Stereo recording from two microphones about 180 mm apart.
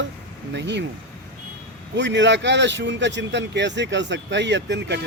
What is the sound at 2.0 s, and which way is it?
Speech, 80° right.